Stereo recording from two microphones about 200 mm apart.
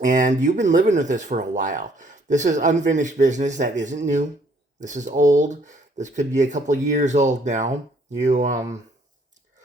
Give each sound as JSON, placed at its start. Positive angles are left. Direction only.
{"t": 0.0, "sound": "speech", "side_deg": -40}